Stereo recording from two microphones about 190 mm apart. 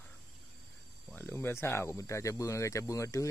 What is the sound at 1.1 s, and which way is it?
Speech, 10° left (ahead or behind).